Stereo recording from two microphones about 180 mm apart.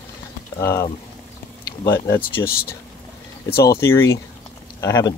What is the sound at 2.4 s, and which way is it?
Speech, 60° left (ahead or behind).